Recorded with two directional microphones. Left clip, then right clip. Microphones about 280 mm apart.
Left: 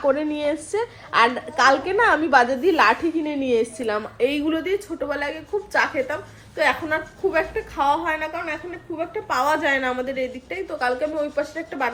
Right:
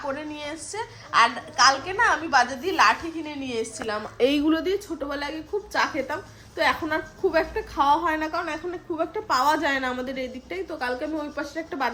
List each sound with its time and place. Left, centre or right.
0.1 s a woman's voice: centre
4.2 s a woman's voice: right
4.4 s a woman's voice: centre